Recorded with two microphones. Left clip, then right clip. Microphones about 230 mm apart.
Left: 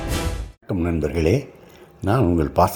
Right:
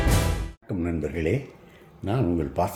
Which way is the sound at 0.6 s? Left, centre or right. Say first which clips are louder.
Left 6 dB; left.